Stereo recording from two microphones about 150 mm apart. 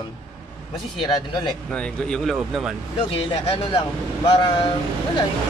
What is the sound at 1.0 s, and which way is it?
Speech, 30° left (ahead or behind).